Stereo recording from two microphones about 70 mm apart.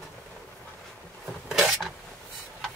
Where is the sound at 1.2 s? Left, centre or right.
Centre.